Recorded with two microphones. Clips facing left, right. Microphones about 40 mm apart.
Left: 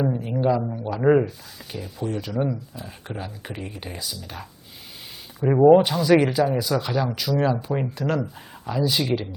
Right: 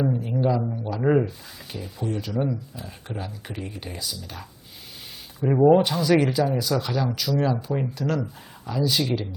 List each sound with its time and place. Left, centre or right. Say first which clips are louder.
0.0 s speech: left 1 dB; centre
5.7 s speech: left 3 dB; centre